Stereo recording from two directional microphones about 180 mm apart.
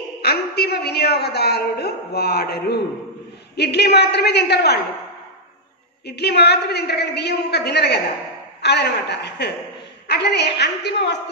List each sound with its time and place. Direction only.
0.2 s a woman's voice: 60° left (ahead or behind)
6.0 s a woman's voice: 65° left (ahead or behind)